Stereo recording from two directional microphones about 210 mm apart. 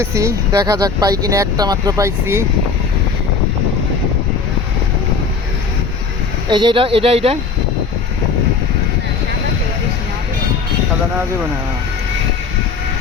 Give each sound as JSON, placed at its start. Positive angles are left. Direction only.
{"t": 0.0, "sound": "speech", "side_deg": -15}
{"t": 6.5, "sound": "speech", "side_deg": -20}